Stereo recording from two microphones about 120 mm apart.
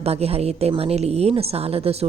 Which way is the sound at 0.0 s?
60° right (ahead or behind).